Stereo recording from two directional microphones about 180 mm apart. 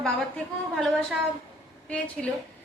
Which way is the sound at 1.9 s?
5° left (ahead or behind).